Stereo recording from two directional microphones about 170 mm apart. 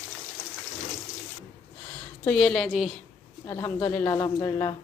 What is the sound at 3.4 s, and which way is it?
Speech, 20° left (ahead or behind).